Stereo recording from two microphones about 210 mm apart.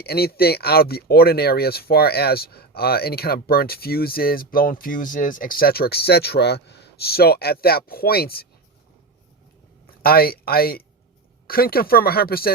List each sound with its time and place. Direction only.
0.0 s speech: 50° left (ahead or behind)
10.0 s speech: 45° left (ahead or behind)